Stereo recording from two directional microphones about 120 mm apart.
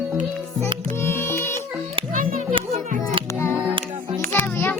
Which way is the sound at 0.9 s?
20° left (ahead or behind).